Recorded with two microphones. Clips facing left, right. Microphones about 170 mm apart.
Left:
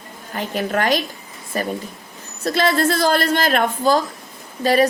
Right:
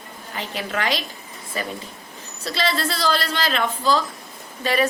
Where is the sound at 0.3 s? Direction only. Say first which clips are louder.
Left 6 dB; 45° left (ahead or behind).